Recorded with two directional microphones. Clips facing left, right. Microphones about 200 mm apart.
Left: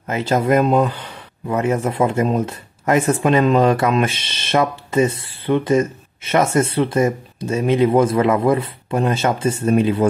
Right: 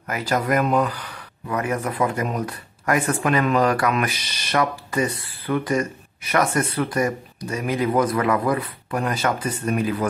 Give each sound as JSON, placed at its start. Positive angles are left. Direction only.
{"t": 0.0, "sound": "speech", "side_deg": 25}